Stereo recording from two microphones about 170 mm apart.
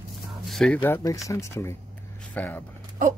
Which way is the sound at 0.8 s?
15° left (ahead or behind).